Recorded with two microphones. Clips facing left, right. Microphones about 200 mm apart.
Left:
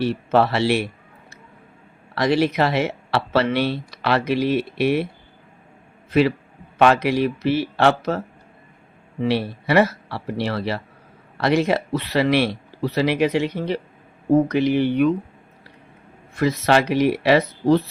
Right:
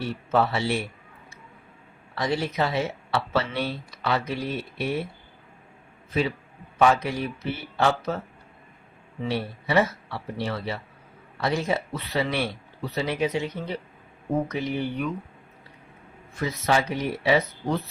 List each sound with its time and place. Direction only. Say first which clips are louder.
0.0 s speech: left 6 dB; 80° left
2.1 s speech: left 7 dB; 80° left
6.1 s a man's voice: left 8 dB; 75° left (ahead or behind)
9.2 s speech: left 7 dB; 80° left
16.3 s speech: left 6 dB; 80° left